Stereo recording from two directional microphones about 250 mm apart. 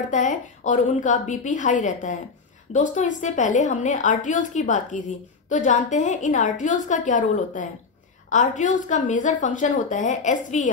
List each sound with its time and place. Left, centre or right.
0.1 s a woman's voice: left